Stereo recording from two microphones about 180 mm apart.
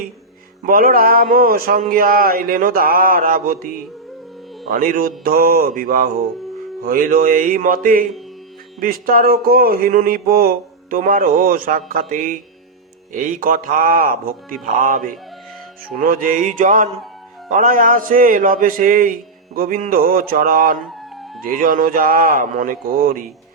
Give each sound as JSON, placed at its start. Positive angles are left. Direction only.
{"t": 0.6, "sound": "speech", "side_deg": -50}
{"t": 4.7, "sound": "speech", "side_deg": -50}
{"t": 20.7, "sound": "a sound", "side_deg": 0}
{"t": 21.4, "sound": "speech", "side_deg": -50}